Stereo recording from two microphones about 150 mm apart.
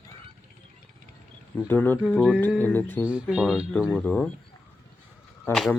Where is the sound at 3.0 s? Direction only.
5° right (ahead or behind).